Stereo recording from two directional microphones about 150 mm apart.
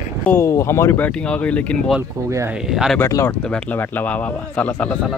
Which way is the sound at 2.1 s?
25° right (ahead or behind).